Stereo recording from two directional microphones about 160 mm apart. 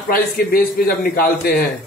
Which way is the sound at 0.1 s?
65° left (ahead or behind).